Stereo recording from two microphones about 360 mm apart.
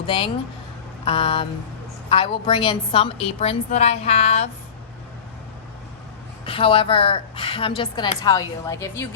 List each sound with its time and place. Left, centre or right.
1.0 s a woman's voice: centre
6.4 s a woman's voice: centre